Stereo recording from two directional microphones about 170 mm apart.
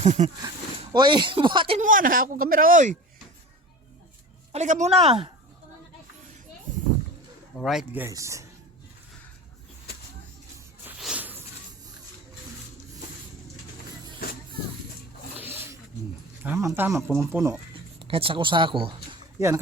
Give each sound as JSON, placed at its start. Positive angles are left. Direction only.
{"t": 0.0, "sound": "speech", "side_deg": -45}
{"t": 0.9, "sound": "speech", "side_deg": -25}
{"t": 1.8, "sound": "speech", "side_deg": -50}
{"t": 4.5, "sound": "speech", "side_deg": -45}
{"t": 7.5, "sound": "speech", "side_deg": 0}
{"t": 11.0, "sound": "snake", "side_deg": -10}
{"t": 15.4, "sound": "roaring cats", "side_deg": -10}
{"t": 16.4, "sound": "speech", "side_deg": -15}
{"t": 18.0, "sound": "speech", "side_deg": -30}